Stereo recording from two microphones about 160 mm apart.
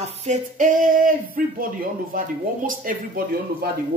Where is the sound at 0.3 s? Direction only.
55° right (ahead or behind).